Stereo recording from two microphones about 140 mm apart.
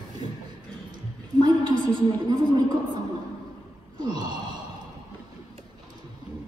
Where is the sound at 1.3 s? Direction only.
30° right (ahead or behind).